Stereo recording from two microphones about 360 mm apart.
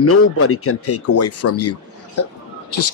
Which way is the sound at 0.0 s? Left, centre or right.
Left.